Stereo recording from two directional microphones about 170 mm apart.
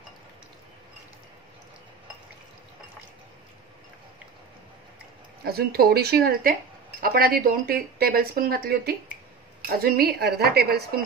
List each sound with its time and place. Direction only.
5.4 s speech: 65° right (ahead or behind)